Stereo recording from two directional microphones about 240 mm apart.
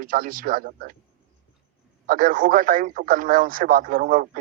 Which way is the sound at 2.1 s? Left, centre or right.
Right.